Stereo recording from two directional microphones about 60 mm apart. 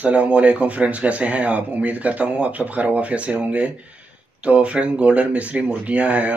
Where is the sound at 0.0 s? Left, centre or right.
Right.